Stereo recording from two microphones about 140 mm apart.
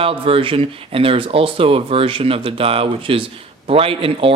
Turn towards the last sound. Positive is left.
turn(degrees=-40)  # may be behind; listen again after turning